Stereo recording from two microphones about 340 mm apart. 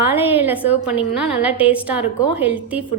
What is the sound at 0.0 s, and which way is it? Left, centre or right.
A woman's voice, centre.